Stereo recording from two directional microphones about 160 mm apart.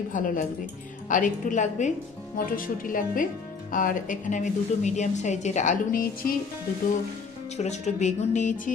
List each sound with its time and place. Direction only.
0.1 s a woman's voice: 55° left (ahead or behind)
2.4 s a woman's voice: 60° left (ahead or behind)
7.5 s a woman's voice: 45° left (ahead or behind)